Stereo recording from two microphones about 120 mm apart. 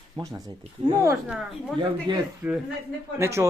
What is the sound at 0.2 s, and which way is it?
Speech, 30° right (ahead or behind).